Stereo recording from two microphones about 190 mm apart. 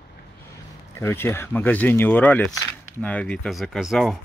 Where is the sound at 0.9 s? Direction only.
10° left (ahead or behind).